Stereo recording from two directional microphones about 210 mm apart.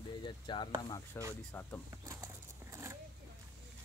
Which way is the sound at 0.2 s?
20° left (ahead or behind).